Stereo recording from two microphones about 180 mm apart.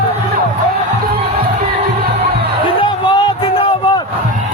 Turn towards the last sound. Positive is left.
turn(degrees=25)  # may be behind; listen again after turning